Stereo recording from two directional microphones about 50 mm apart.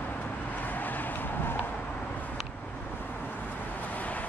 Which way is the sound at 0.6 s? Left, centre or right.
Left.